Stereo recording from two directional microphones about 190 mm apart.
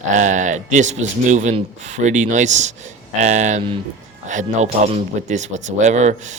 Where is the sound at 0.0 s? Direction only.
40° right (ahead or behind).